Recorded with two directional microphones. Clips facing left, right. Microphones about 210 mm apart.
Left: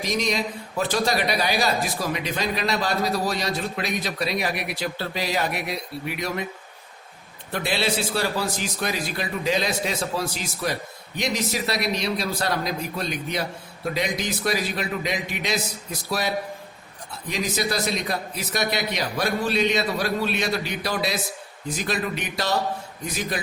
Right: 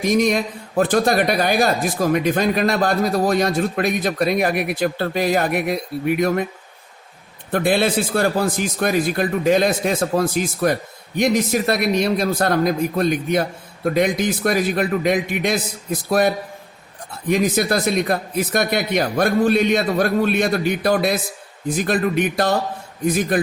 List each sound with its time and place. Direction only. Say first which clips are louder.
0.0 s a man's voice: right 8 dB; 50° right (ahead or behind)
7.5 s a man's voice: right 7 dB; 50° right (ahead or behind)